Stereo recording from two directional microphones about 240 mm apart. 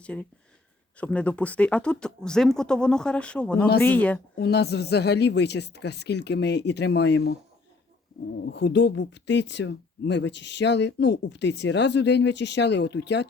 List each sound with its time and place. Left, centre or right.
0.0 s speech: centre
4.4 s speech: left
8.4 s speech: left